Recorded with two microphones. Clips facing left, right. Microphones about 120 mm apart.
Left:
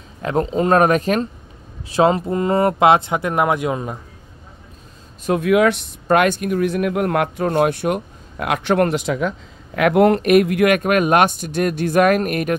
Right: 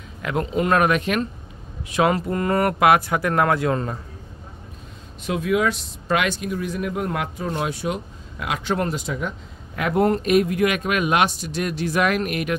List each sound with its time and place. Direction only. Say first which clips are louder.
0.2 s speech: left 4 dB; 35° left (ahead or behind); by 4.0 s 15° left (ahead or behind)
5.4 s speech: left 6 dB; 65° left (ahead or behind); by 12.5 s 45° left (ahead or behind)